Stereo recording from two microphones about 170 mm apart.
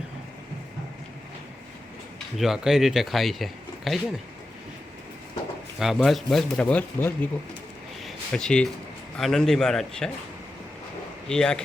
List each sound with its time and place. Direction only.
2.1 s speech: centre (ahead or behind)
5.8 s speech: centre (ahead or behind)
8.0 s a sound: 5° left (ahead or behind)
9.1 s speech: 5° left (ahead or behind)
11.3 s speech: 5° left (ahead or behind)